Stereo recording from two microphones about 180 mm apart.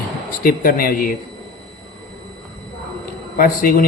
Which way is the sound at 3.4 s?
55° left (ahead or behind).